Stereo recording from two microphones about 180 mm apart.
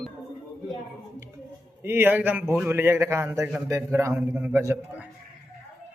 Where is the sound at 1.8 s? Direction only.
10° right (ahead or behind).